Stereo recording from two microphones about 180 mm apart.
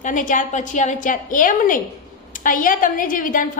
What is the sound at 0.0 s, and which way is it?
A woman's voice, 45° left (ahead or behind).